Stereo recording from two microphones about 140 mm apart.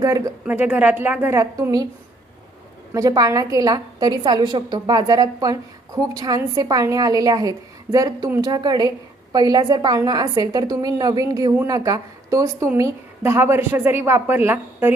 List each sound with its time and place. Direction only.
0.0 s a woman's voice: 25° right (ahead or behind)
2.9 s a woman's voice: 25° right (ahead or behind)